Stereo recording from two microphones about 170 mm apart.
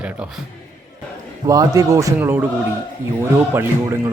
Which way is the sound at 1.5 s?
20° right (ahead or behind).